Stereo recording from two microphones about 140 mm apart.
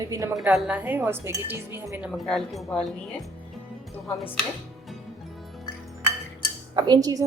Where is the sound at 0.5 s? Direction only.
10° right (ahead or behind).